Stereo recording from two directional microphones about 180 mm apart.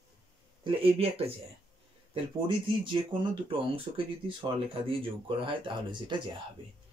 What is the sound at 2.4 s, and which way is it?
Speech, 25° right (ahead or behind).